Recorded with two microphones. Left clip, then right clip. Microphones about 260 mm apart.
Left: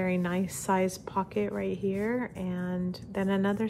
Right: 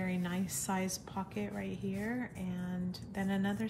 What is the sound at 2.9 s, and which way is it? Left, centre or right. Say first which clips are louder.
Speech: left 8 dB; centre.